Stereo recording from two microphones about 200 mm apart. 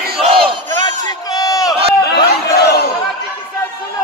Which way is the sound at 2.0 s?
55° left (ahead or behind).